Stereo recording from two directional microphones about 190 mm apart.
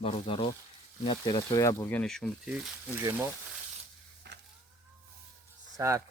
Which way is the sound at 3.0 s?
15° right (ahead or behind).